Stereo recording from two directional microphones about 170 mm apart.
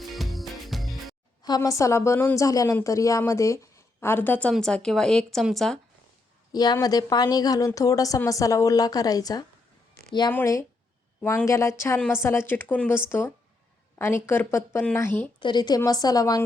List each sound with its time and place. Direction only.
0.0 s music: centre (ahead or behind)
1.4 s a woman's voice: 25° left (ahead or behind); by 5.8 s centre (ahead or behind)
6.5 s a woman's voice: 25° left (ahead or behind)
15.4 s a woman's voice: 25° left (ahead or behind)